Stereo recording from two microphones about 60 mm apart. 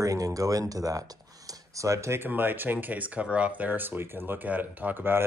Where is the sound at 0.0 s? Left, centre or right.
Right.